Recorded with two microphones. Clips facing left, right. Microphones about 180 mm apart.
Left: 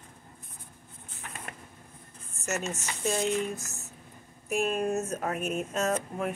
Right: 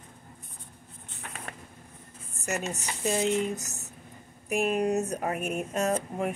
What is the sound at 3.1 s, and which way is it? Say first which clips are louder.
Speech: right 3 dB; 20° right (ahead or behind).